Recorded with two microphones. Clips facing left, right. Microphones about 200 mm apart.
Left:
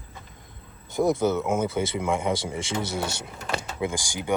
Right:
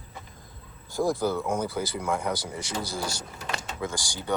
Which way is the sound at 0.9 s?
20° left (ahead or behind).